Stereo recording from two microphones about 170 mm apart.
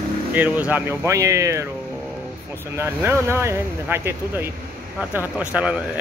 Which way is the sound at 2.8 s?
15° right (ahead or behind).